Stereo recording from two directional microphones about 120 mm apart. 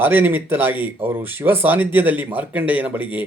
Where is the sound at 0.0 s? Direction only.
15° right (ahead or behind).